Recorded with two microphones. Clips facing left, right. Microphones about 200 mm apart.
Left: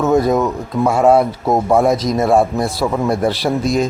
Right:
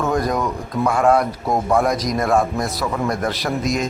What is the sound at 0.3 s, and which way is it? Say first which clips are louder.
Speech: left 5 dB; 25° left (ahead or behind).